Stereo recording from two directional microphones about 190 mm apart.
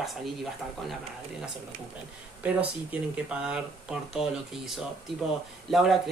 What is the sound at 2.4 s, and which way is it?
Speech, 5° right (ahead or behind).